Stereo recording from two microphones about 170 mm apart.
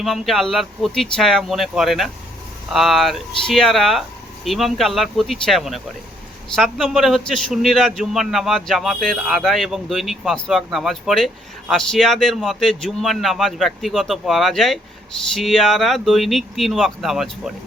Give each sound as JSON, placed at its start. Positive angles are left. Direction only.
{"t": 0.0, "sound": "a man's voice", "side_deg": 0}